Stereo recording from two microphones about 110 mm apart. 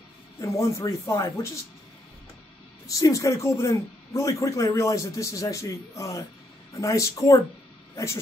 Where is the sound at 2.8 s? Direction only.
30° left (ahead or behind).